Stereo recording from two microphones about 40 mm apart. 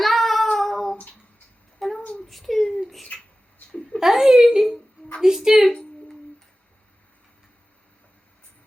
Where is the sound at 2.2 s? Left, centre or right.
Centre.